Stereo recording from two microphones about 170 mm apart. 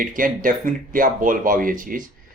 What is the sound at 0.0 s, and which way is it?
Speech, 55° right (ahead or behind).